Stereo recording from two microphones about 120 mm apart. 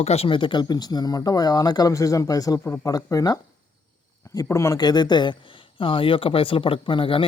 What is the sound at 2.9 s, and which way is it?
Speech, 30° left (ahead or behind).